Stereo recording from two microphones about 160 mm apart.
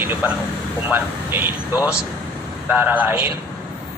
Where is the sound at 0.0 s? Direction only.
10° right (ahead or behind).